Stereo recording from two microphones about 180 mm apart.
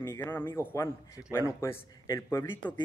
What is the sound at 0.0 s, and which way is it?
Speech, 15° left (ahead or behind).